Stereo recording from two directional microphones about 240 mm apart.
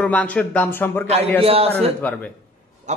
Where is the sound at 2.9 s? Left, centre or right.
Right.